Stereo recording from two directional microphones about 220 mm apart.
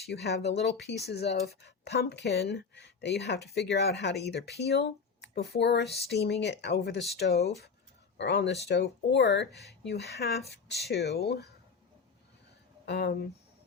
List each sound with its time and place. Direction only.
0.0 s speech: 50° left (ahead or behind)
12.8 s speech: 50° left (ahead or behind)